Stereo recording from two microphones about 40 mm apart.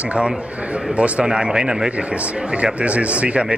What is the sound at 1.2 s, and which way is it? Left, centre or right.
Speech, centre.